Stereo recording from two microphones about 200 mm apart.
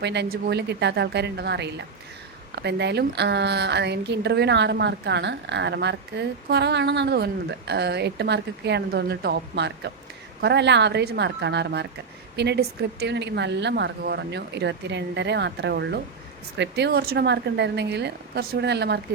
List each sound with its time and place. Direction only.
0.0 s a woman's voice: 60° right (ahead or behind)